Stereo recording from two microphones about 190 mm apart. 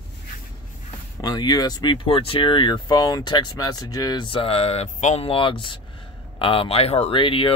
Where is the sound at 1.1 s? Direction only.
20° left (ahead or behind).